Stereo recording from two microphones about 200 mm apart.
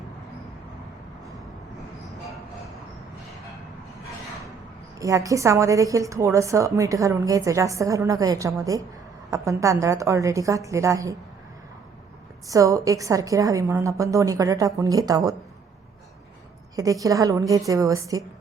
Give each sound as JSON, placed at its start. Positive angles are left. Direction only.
{"t": 4.9, "sound": "a woman's voice", "side_deg": -15}
{"t": 12.5, "sound": "a woman's voice", "side_deg": -15}
{"t": 16.7, "sound": "a woman's voice", "side_deg": -15}